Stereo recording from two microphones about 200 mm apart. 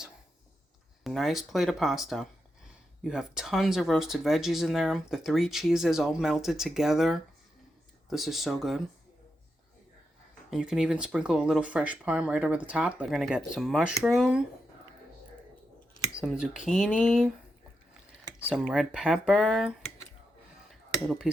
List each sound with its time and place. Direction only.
1.0 s speech: centre (ahead or behind)
10.5 s speech: 5° right (ahead or behind)
16.2 s speech: centre (ahead or behind)
18.7 s speech: 5° right (ahead or behind)
20.7 s a sound: centre (ahead or behind)